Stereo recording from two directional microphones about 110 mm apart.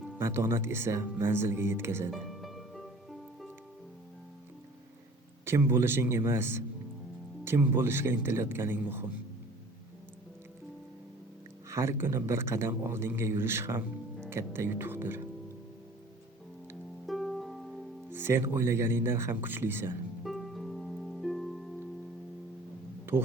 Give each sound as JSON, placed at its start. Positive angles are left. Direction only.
{"t": 0.2, "sound": "speech", "side_deg": -25}
{"t": 2.0, "sound": "music", "side_deg": 0}
{"t": 5.5, "sound": "speech", "side_deg": -20}
{"t": 11.7, "sound": "speech", "side_deg": -25}
{"t": 17.1, "sound": "music", "side_deg": 0}
{"t": 18.1, "sound": "speech", "side_deg": -20}
{"t": 20.2, "sound": "harp", "side_deg": 0}
{"t": 23.1, "sound": "speech", "side_deg": -20}